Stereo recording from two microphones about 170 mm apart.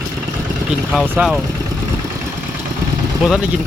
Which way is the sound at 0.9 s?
Centre (ahead or behind).